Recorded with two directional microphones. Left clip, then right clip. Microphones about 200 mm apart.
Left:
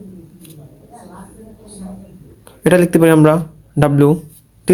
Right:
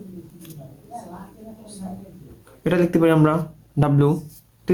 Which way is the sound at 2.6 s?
50° left (ahead or behind).